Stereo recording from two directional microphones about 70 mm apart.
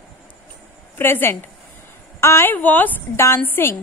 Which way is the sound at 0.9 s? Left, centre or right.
Left.